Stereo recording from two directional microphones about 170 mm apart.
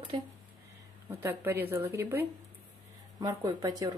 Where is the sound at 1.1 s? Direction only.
10° right (ahead or behind).